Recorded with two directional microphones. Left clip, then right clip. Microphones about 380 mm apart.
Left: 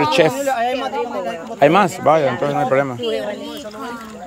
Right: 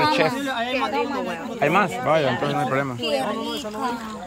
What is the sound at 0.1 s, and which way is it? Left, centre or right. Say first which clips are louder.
A man's voice: left 6 dB; centre.